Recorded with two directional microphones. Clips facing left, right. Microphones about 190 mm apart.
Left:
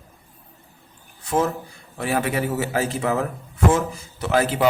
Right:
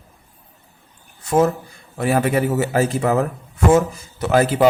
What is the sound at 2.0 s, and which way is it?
A man's voice, 45° right (ahead or behind).